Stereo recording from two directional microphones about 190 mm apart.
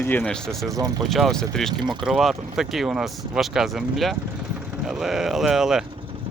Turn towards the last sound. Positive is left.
turn(degrees=-5)  # may be behind; listen again after turning